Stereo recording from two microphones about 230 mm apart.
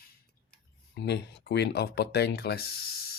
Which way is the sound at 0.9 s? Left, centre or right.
Left.